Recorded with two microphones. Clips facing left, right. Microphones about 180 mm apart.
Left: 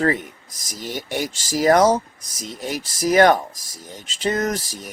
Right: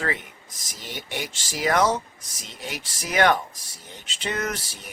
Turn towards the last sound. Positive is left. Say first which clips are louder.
# left 6 dB
turn(degrees=40)  # may be behind; listen again after turning